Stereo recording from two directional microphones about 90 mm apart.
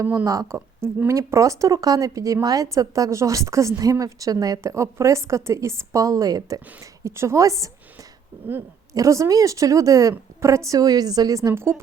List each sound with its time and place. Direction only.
0.0 s a woman's voice: 25° right (ahead or behind)
8.9 s speech: 35° right (ahead or behind)